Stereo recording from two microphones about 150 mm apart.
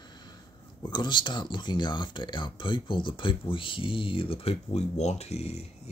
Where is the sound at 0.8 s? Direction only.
30° left (ahead or behind).